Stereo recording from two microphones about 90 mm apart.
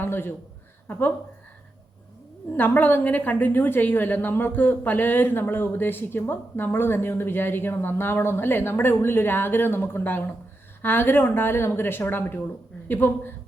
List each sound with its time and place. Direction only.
0.0 s a woman's voice: 25° left (ahead or behind)
2.6 s a woman's voice: 20° left (ahead or behind)